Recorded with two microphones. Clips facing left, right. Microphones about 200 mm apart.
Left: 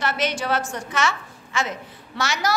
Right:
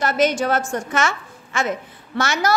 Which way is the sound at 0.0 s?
45° right (ahead or behind).